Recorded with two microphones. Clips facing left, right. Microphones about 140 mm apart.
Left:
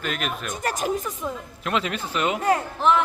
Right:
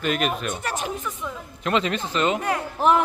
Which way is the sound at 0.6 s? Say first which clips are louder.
Left 3 dB; 40° left (ahead or behind).